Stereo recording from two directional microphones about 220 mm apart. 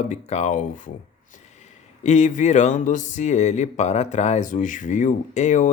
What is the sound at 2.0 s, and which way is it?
Speech, 30° left (ahead or behind).